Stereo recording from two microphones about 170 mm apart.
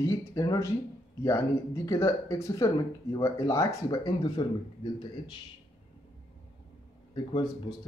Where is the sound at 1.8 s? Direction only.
20° left (ahead or behind).